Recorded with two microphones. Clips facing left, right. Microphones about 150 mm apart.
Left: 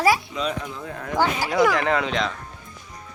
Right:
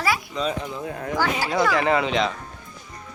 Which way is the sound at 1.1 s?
25° left (ahead or behind).